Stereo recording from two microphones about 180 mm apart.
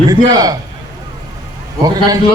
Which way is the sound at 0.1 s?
20° right (ahead or behind).